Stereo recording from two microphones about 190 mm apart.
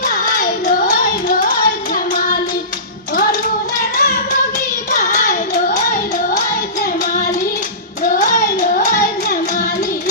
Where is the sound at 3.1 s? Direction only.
50° left (ahead or behind).